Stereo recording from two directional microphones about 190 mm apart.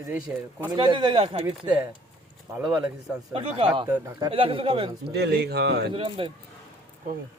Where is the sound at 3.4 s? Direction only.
30° right (ahead or behind).